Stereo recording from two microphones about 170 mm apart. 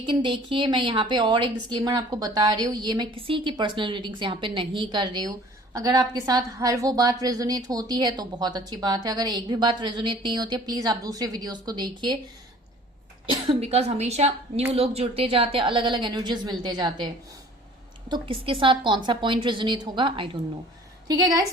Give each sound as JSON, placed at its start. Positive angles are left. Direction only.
{"t": 0.0, "sound": "a woman's voice", "side_deg": -30}
{"t": 13.3, "sound": "a woman's voice", "side_deg": -35}
{"t": 18.1, "sound": "a woman's voice", "side_deg": -30}